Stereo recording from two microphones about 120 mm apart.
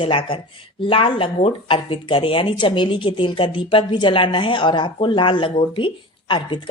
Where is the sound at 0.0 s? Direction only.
45° left (ahead or behind).